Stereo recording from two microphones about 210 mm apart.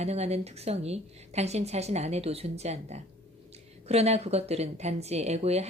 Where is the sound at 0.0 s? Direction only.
30° right (ahead or behind).